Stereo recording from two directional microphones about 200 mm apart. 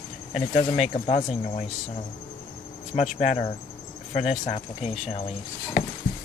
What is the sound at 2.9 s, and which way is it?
Speech, 35° left (ahead or behind).